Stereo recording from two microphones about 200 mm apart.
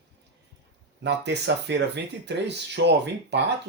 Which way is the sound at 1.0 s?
60° right (ahead or behind).